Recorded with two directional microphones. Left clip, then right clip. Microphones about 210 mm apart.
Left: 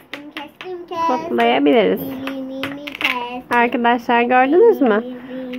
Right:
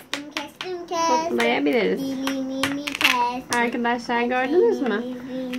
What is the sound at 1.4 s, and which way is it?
Speech, 35° left (ahead or behind).